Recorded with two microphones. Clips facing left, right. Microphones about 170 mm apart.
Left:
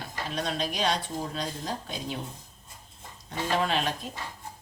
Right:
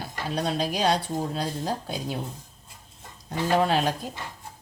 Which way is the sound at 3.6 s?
35° right (ahead or behind).